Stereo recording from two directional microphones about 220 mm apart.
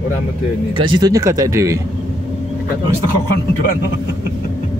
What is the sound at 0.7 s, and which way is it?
Speech, 20° right (ahead or behind).